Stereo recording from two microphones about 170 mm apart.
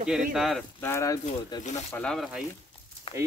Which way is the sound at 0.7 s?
15° left (ahead or behind).